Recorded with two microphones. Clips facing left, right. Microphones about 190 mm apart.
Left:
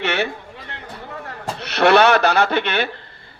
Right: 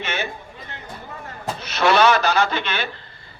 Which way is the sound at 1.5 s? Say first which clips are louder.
Left 4 dB; 65° left (ahead or behind).